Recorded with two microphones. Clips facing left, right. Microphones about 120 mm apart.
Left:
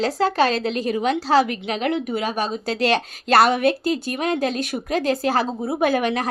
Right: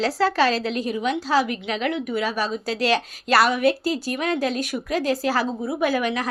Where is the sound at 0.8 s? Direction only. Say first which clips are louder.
Left 3 dB; 80° left.